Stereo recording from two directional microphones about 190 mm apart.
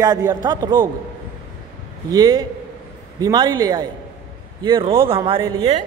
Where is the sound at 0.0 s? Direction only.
20° right (ahead or behind).